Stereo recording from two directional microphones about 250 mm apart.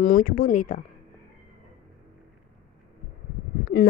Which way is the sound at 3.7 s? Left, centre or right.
Left.